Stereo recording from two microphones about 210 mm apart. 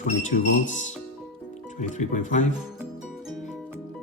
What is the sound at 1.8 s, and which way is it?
Speech, 35° left (ahead or behind).